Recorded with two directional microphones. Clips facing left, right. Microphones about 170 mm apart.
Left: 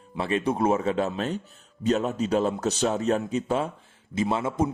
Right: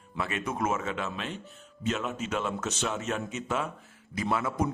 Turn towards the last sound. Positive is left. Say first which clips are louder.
# left 4 dB
turn(degrees=25)  # may be behind; listen again after turning